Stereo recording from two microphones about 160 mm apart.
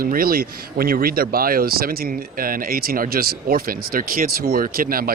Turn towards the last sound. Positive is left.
turn(degrees=-65)  # may be behind; listen again after turning